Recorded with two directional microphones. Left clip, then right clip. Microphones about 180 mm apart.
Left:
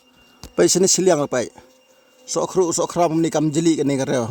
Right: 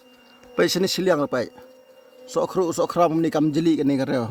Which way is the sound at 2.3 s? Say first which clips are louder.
Left 3 dB; 45° left (ahead or behind).